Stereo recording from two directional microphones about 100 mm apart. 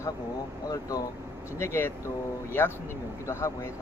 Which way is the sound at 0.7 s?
35° left (ahead or behind).